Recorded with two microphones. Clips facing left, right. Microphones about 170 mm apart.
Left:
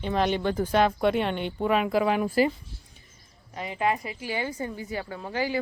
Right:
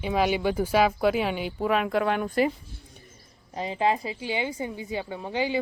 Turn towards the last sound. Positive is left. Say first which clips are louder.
# right 1 dB
turn(degrees=-20)  # may be behind; listen again after turning